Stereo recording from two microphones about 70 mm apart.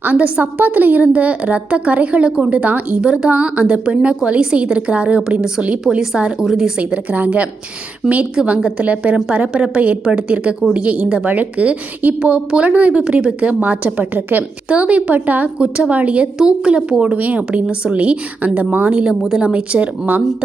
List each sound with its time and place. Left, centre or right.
0.0 s a woman's voice: right; by 6.7 s centre
6.7 s a woman's voice: right
8.4 s a woman's voice: centre